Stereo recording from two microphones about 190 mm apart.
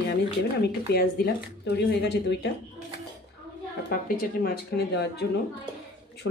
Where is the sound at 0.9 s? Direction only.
55° left (ahead or behind).